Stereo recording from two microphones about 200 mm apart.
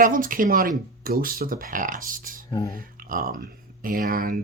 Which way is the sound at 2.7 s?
45° right (ahead or behind).